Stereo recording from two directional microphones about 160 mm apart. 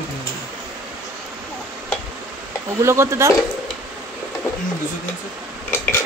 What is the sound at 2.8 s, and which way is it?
Speech, 15° right (ahead or behind).